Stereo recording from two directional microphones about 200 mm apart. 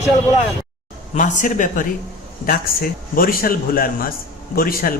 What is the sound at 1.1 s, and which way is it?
A man's voice, 40° left (ahead or behind).